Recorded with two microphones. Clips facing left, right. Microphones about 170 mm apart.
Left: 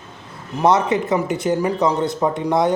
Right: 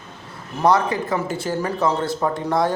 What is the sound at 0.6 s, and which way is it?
A man's voice, 20° left (ahead or behind).